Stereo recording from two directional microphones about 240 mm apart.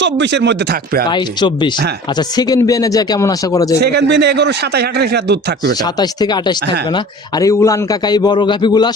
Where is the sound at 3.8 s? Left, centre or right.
Right.